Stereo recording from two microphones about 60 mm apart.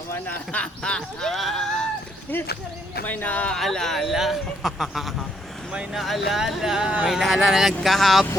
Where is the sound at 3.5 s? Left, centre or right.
Centre.